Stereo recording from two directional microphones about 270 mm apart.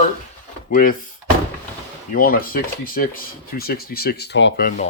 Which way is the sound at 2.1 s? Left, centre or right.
Left.